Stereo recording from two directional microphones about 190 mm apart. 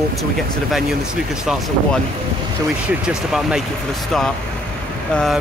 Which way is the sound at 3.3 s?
5° right (ahead or behind).